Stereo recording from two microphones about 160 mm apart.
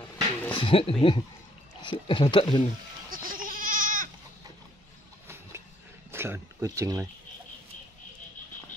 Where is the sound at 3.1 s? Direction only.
60° right (ahead or behind).